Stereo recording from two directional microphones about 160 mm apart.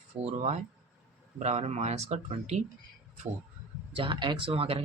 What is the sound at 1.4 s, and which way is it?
Speech, 45° right (ahead or behind).